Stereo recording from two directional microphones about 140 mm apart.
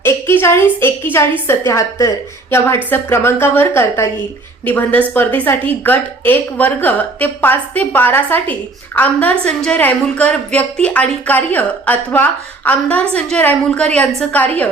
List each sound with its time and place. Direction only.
0.0 s a woman's voice: 15° left (ahead or behind)